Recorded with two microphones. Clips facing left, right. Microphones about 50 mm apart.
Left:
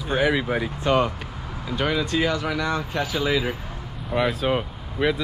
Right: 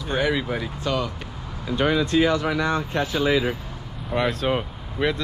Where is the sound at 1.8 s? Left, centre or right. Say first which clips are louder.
Right 3 dB; right.